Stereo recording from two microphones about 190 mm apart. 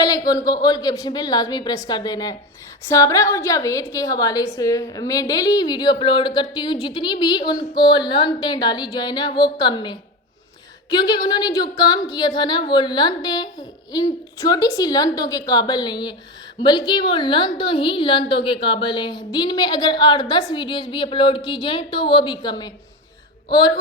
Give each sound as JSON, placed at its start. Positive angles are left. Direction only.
{"t": 0.3, "sound": "a woman's voice", "side_deg": 20}